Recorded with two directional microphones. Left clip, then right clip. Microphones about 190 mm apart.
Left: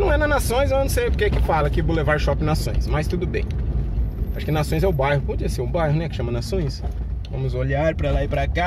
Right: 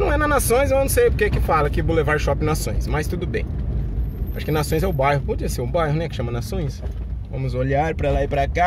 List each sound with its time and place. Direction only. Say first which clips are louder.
0.0 s vehicle: right 1 dB; 40° right (ahead or behind)
0.9 s speech: right 4 dB; 35° right (ahead or behind)
4.5 s speech: even; 35° right (ahead or behind)